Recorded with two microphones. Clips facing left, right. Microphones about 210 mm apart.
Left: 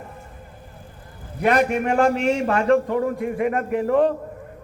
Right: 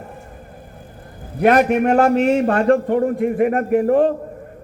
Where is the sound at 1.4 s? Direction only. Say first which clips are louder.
Right 5 dB; 55° right (ahead or behind).